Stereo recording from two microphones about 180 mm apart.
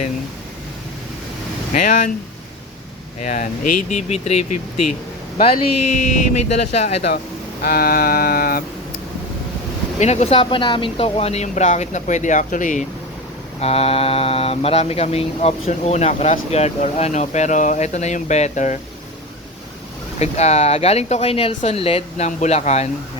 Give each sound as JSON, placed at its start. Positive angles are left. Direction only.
{"t": 1.7, "sound": "speech", "side_deg": 45}
{"t": 3.2, "sound": "speech", "side_deg": 45}
{"t": 6.1, "sound": "speech", "side_deg": 35}
{"t": 7.6, "sound": "a sound", "side_deg": 55}
{"t": 10.0, "sound": "speech", "side_deg": 35}
{"t": 13.6, "sound": "speech", "side_deg": 35}
{"t": 20.1, "sound": "speech", "side_deg": 35}